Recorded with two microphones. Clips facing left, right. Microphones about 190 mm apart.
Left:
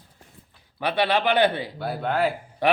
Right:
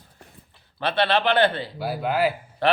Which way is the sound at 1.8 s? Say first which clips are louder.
Right 1 dB; 5° right (ahead or behind).